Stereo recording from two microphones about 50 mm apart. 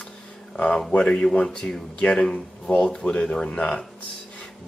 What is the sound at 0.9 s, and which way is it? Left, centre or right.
Speech, centre.